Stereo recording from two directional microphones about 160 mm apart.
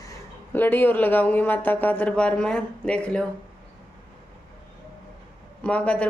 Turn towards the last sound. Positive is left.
turn(degrees=10)  # may be behind; listen again after turning